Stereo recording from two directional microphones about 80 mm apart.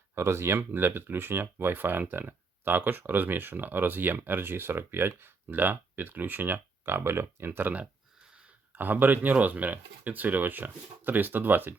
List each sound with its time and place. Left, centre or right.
0.1 s speech: right